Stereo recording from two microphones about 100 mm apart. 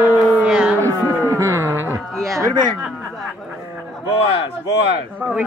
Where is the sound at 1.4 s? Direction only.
25° right (ahead or behind).